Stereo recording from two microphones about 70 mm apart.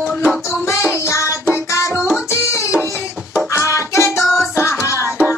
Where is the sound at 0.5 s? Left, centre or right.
Left.